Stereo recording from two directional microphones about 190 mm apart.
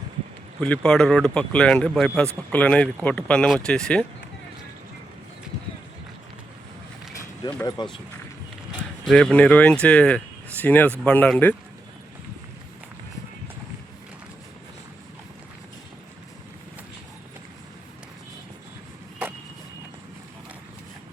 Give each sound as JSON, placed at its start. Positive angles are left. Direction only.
{"t": 0.6, "sound": "speech", "side_deg": 5}
{"t": 7.4, "sound": "speech", "side_deg": 20}
{"t": 9.0, "sound": "speech", "side_deg": 5}